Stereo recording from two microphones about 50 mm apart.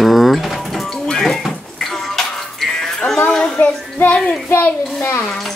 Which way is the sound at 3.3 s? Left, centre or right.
Centre.